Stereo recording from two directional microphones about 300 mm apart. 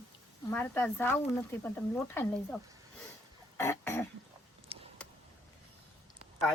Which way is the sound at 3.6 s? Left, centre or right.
Centre.